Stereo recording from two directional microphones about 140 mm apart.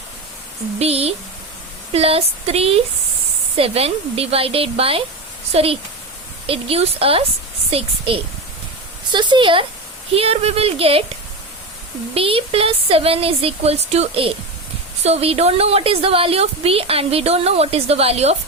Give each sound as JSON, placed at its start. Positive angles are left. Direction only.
{"t": 0.8, "sound": "a woman's voice", "side_deg": -45}
{"t": 12.1, "sound": "a woman's voice", "side_deg": -40}